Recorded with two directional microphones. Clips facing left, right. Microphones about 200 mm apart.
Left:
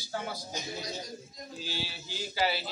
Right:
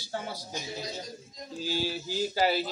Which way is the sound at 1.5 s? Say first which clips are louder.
Right 9 dB; 45° right (ahead or behind).